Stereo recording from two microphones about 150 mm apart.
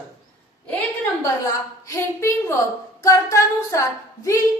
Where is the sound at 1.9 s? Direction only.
20° left (ahead or behind).